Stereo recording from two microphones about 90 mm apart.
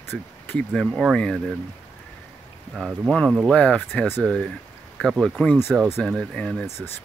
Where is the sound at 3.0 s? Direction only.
5° left (ahead or behind).